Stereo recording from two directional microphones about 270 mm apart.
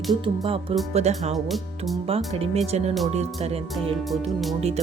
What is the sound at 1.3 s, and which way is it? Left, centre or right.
Speech, centre.